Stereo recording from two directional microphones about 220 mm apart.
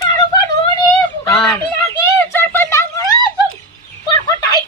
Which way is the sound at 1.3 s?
5° left (ahead or behind).